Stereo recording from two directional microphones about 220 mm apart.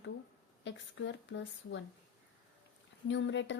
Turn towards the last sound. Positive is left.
turn(degrees=55)  # may be behind; listen again after turning